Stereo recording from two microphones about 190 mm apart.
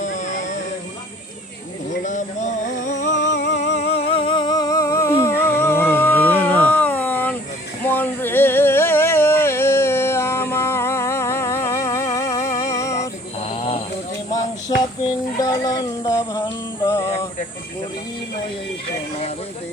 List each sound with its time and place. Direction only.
0.0 s music: 40° left (ahead or behind)
2.0 s music: 40° left (ahead or behind)
3.3 s music: 65° left (ahead or behind)
3.8 s humming: 30° left (ahead or behind); by 6.6 s 10° left (ahead or behind)
6.7 s a sound: 10° left (ahead or behind)
13.5 s mantra: 30° left (ahead or behind)
15.4 s a sound: 20° left (ahead or behind)
16.8 s music: 15° left (ahead or behind)